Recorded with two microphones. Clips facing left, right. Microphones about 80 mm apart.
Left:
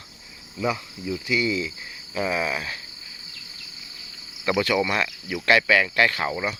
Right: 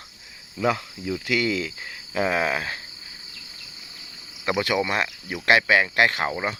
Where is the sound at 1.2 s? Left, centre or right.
Right.